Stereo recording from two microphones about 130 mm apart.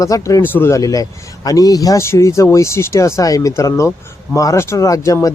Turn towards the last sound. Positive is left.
turn(degrees=25)  # may be behind; listen again after turning